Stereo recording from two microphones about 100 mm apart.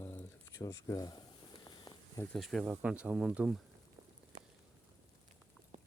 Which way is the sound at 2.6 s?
15° right (ahead or behind).